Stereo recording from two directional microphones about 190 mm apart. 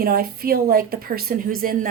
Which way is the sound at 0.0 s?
50° right (ahead or behind).